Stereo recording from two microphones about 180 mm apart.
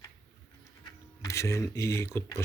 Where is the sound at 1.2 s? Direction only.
15° left (ahead or behind).